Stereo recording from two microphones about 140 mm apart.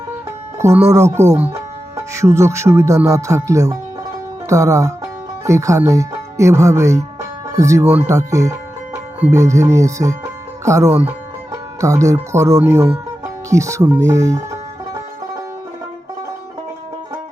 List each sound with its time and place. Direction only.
0.9 s speech: 20° right (ahead or behind)